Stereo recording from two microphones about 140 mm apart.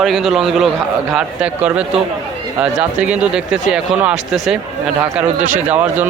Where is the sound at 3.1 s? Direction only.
5° right (ahead or behind).